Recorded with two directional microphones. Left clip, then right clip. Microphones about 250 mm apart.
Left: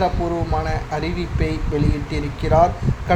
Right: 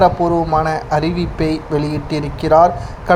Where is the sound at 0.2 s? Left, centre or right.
Centre.